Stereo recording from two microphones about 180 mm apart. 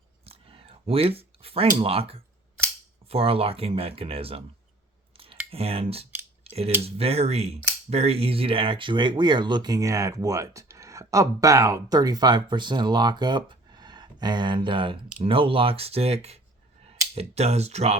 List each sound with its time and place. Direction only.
0.3 s a sound: 30° right (ahead or behind)
1.8 s speech: 35° right (ahead or behind)
5.1 s a sound: 30° right (ahead or behind)
5.5 s speech: 30° right (ahead or behind)
6.4 s cutlery: 35° right (ahead or behind)
6.8 s speech: 35° right (ahead or behind)